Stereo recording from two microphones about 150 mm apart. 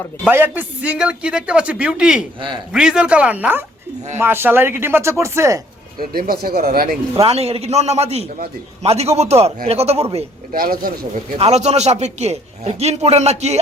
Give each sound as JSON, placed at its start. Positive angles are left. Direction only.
{"t": 0.3, "sound": "a man's voice", "side_deg": -15}
{"t": 6.0, "sound": "speech", "side_deg": -80}
{"t": 7.2, "sound": "a man's voice", "side_deg": -45}
{"t": 10.5, "sound": "speech", "side_deg": -75}
{"t": 11.3, "sound": "a man's voice", "side_deg": -45}